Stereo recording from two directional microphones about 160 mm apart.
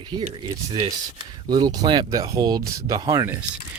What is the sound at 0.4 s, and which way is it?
Speech, 30° right (ahead or behind).